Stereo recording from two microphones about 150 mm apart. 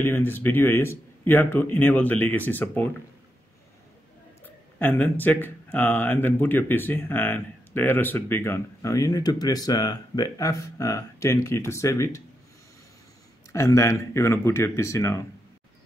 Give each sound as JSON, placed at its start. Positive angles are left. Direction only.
{"t": 0.0, "sound": "speech", "side_deg": 15}
{"t": 4.7, "sound": "speech", "side_deg": 10}
{"t": 13.5, "sound": "speech", "side_deg": 20}